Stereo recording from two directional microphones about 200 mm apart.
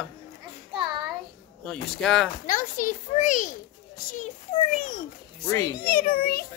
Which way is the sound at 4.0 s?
45° left (ahead or behind).